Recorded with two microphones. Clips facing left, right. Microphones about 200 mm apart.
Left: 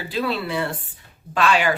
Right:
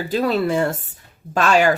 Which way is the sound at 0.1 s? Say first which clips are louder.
Right 6 dB; 45° right (ahead or behind).